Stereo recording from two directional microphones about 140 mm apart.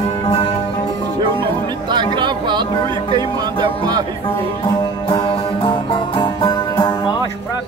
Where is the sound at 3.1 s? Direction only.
30° right (ahead or behind).